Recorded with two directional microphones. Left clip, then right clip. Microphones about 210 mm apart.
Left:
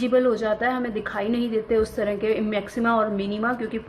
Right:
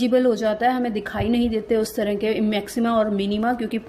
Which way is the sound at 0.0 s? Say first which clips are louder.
Right 2 dB; 40° right (ahead or behind).